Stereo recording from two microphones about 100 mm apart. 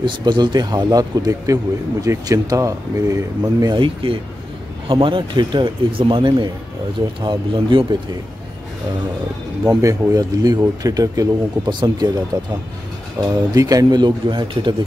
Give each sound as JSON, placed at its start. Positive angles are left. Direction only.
{"t": 0.0, "sound": "speech", "side_deg": -45}
{"t": 3.6, "sound": "speech", "side_deg": -55}
{"t": 9.7, "sound": "speech", "side_deg": -35}
{"t": 13.2, "sound": "speech", "side_deg": -35}